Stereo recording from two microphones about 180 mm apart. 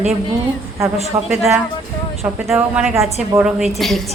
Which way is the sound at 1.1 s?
20° right (ahead or behind).